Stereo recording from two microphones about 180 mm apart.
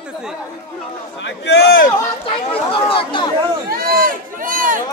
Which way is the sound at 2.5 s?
30° left (ahead or behind).